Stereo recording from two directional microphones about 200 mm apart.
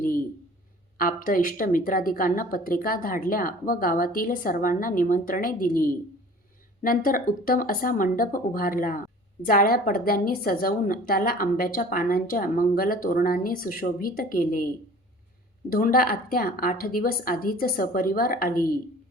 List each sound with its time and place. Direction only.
0.0 s a sound: 45° left (ahead or behind)
0.9 s a woman's voice: 45° left (ahead or behind)
15.7 s a woman's voice: 45° left (ahead or behind)